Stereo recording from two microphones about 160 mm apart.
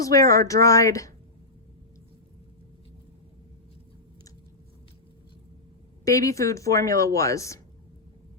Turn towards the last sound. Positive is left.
turn(degrees=20)  # may be behind; listen again after turning